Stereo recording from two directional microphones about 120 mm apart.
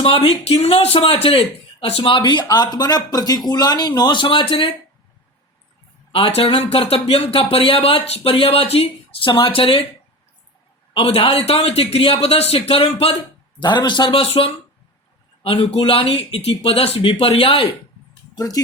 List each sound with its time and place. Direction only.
0.3 s speech: 55° left (ahead or behind)
6.1 s speech: 50° left (ahead or behind)
10.9 s speech: 50° left (ahead or behind)
13.6 s speech: 40° left (ahead or behind)
18.3 s speech: 30° left (ahead or behind)